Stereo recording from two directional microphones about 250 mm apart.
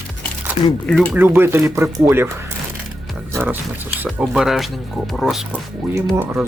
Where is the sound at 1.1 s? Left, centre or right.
Centre.